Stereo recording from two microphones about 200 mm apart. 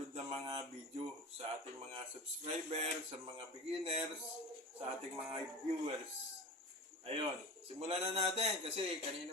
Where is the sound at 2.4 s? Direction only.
30° right (ahead or behind).